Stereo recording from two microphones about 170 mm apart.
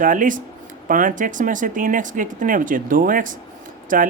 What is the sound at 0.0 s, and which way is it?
Speech, 50° right (ahead or behind).